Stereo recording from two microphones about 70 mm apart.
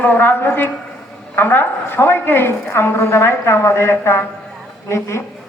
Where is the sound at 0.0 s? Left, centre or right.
Left.